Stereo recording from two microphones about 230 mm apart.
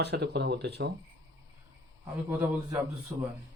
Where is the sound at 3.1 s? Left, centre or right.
Centre.